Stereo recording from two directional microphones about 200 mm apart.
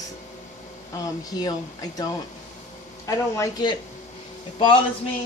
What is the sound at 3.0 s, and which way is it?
Speech, 20° left (ahead or behind).